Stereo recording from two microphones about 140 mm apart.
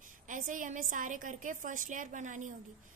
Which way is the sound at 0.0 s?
70° right (ahead or behind).